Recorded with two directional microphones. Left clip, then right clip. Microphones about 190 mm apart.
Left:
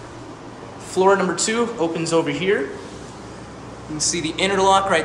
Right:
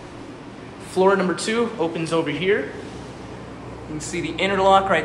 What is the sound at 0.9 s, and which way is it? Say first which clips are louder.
Speech: left 1 dB; 15° left (ahead or behind).